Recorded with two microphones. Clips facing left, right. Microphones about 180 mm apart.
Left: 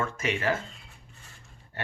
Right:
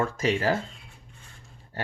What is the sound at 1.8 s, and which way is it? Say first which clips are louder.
Dog: right 4 dB; 35° right (ahead or behind).